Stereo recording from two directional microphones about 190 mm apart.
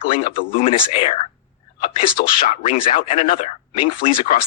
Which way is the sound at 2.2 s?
45° left (ahead or behind).